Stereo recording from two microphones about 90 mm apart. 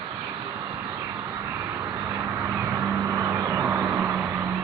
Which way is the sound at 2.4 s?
15° right (ahead or behind).